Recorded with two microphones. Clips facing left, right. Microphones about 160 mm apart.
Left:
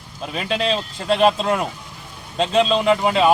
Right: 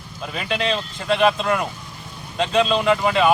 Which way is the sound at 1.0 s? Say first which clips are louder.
Left 2 dB; 30° left (ahead or behind).